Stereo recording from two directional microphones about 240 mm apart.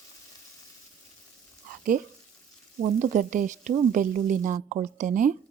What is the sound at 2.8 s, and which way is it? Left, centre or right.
A woman's voice, right.